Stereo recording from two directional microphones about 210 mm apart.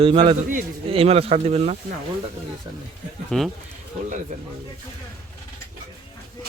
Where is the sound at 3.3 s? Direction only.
Centre (ahead or behind).